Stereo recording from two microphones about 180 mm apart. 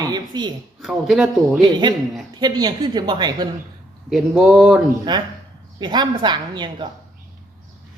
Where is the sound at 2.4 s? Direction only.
25° right (ahead or behind).